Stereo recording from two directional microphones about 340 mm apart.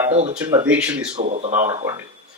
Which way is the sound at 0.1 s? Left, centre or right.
Centre.